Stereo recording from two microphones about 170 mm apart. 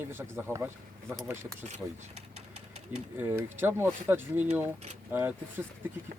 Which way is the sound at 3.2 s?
10° right (ahead or behind).